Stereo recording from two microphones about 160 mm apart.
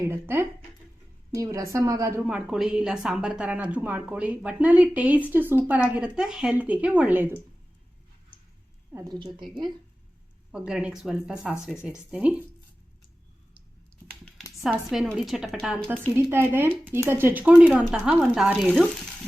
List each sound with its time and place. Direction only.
0.0 s a woman's voice: 15° right (ahead or behind)
2.2 s speech: 5° right (ahead or behind)
8.9 s a woman's voice: 20° right (ahead or behind)
9.1 s a woman's voice: 30° right (ahead or behind)
10.5 s a woman's voice: 5° right (ahead or behind)
14.3 s a woman's voice: centre (ahead or behind)